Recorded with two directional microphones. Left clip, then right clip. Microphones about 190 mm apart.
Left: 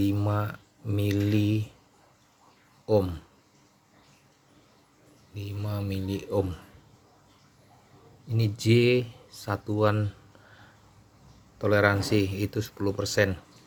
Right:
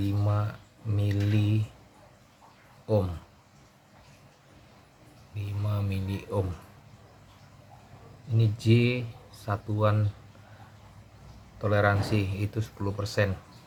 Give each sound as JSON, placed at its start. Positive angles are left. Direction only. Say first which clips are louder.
{"t": 0.0, "sound": "speech", "louder": "left 4 dB", "side_deg": 45}
{"t": 2.8, "sound": "speech", "louder": "left 4 dB", "side_deg": 35}
{"t": 5.3, "sound": "speech", "louder": "left 1 dB", "side_deg": 35}
{"t": 8.4, "sound": "speech", "louder": "left 3 dB", "side_deg": 45}
{"t": 11.6, "sound": "speech", "louder": "left 2 dB", "side_deg": 45}